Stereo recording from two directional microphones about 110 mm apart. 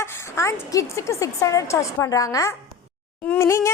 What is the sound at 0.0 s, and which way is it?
A woman's voice, 25° left (ahead or behind).